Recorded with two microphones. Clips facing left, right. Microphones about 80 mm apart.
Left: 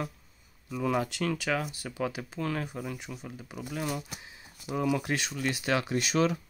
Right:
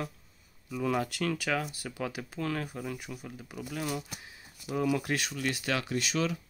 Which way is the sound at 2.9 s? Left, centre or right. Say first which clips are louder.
Even; centre.